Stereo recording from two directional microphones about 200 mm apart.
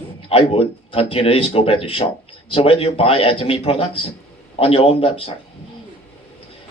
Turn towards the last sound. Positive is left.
turn(degrees=30)  # may be behind; listen again after turning